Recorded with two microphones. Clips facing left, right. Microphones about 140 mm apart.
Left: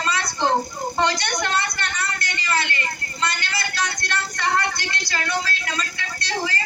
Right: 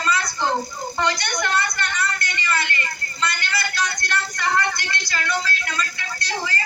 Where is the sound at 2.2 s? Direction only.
30° left (ahead or behind).